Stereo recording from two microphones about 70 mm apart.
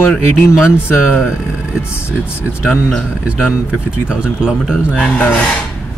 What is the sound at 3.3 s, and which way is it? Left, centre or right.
Speech, centre.